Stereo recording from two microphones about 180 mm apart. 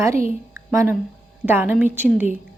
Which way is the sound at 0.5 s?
15° right (ahead or behind).